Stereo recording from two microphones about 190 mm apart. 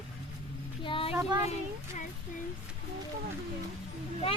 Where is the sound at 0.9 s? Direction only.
30° left (ahead or behind).